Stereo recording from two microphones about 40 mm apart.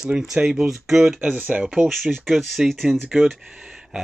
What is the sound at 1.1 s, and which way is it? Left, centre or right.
Speech, right.